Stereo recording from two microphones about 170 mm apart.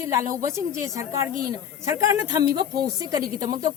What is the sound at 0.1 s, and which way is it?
A woman's voice, 15° right (ahead or behind).